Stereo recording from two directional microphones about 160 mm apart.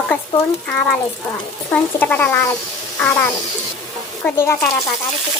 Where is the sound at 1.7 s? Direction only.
10° left (ahead or behind).